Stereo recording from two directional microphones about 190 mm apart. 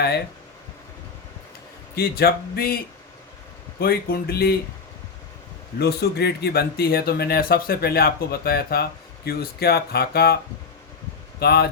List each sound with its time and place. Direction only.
2.0 s speech: 55° left (ahead or behind)
3.8 s speech: 55° left (ahead or behind)
5.8 s speech: 60° left (ahead or behind)
11.3 s speech: 55° left (ahead or behind)